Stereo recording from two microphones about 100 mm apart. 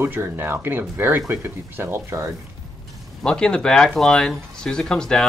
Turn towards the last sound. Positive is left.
turn(degrees=5)  # may be behind; listen again after turning